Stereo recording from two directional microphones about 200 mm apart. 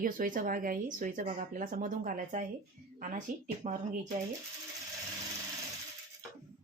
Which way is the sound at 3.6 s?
35° right (ahead or behind).